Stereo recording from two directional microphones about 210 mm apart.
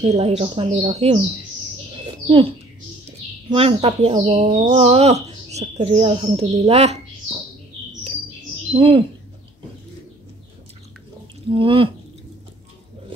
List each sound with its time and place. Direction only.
0.1 s speech: 30° right (ahead or behind)
2.2 s speech: 25° right (ahead or behind)
8.7 s speech: 25° right (ahead or behind)
11.5 s speech: 25° right (ahead or behind)